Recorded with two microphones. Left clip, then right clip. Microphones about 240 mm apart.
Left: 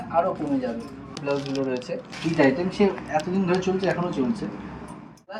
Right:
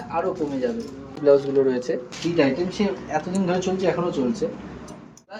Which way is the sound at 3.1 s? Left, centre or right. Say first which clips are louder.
Even; centre.